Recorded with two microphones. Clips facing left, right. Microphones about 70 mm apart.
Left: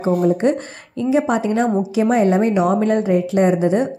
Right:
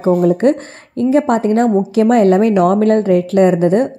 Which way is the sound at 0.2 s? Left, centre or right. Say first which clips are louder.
Right 4 dB; right.